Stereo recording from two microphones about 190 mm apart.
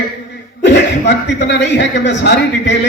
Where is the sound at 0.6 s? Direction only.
65° left (ahead or behind).